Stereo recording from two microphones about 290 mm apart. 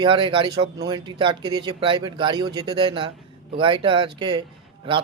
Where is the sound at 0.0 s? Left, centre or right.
Centre.